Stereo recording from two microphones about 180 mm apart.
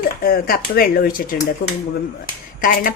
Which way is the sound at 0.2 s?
55° left (ahead or behind).